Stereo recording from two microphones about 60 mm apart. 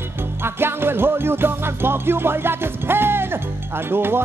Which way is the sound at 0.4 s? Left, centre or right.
Right.